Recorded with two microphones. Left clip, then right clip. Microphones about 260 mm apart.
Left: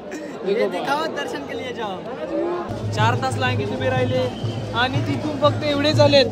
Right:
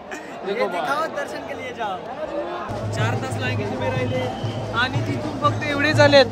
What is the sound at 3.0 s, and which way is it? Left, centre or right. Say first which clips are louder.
Speech: left 7 dB; centre.